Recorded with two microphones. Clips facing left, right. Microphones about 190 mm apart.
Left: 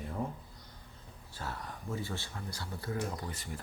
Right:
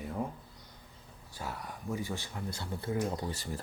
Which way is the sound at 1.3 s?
15° right (ahead or behind).